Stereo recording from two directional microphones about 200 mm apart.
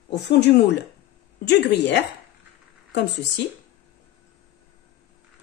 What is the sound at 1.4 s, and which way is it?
Speech, 60° left (ahead or behind).